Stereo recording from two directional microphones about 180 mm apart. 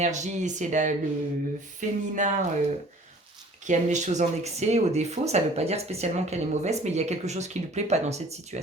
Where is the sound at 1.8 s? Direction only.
45° right (ahead or behind).